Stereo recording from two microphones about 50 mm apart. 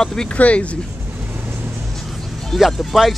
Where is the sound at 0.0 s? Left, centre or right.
Centre.